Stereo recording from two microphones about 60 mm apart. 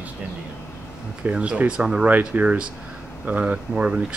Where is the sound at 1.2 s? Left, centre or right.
Right.